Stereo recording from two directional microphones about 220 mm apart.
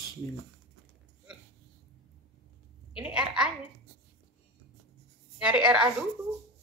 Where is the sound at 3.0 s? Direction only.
5° right (ahead or behind).